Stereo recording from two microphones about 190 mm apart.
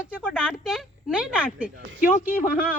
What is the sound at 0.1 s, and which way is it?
Speech, 5° right (ahead or behind).